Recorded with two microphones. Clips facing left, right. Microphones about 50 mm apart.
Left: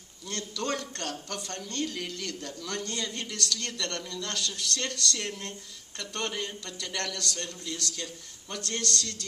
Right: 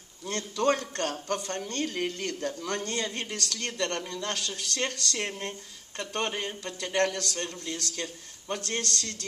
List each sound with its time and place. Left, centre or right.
0.3 s a woman's voice: right